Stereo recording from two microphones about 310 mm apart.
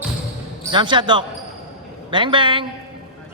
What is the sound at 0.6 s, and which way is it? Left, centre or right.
Speech, centre.